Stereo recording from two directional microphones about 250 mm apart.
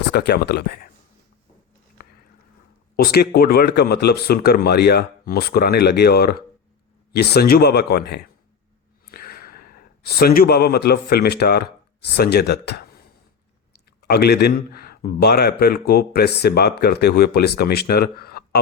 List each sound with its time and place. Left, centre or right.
0.1 s speech: left
2.0 s a sound: left
2.9 s speech: left
14.0 s speech: left